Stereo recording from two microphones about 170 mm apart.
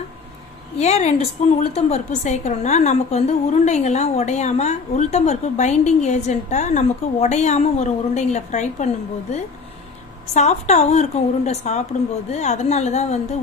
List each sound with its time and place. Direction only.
0.8 s a woman's voice: 40° left (ahead or behind)